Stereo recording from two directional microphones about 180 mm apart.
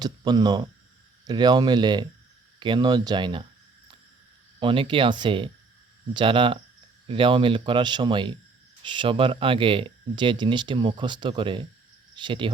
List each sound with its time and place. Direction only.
0.0 s speech: 25° right (ahead or behind)
4.6 s speech: 30° right (ahead or behind)